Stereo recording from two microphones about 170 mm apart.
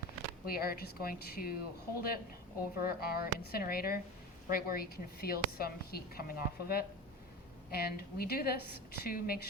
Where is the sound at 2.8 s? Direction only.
65° left (ahead or behind).